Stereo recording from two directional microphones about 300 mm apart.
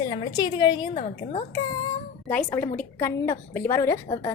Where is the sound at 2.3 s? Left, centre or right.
Centre.